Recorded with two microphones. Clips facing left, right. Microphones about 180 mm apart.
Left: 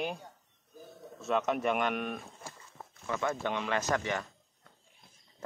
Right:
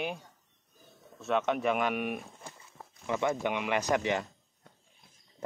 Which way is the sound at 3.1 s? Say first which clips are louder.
Right 3 dB; 15° right (ahead or behind).